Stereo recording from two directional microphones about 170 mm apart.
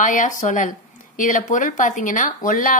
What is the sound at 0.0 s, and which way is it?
Speech, 50° left (ahead or behind).